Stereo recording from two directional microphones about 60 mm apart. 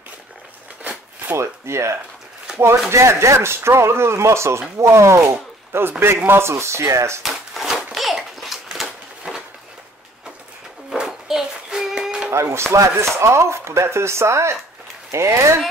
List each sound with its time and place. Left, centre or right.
1.3 s speech: right
7.2 s a sound: centre
10.9 s child singing: centre
12.3 s chopping: right
12.7 s speech: right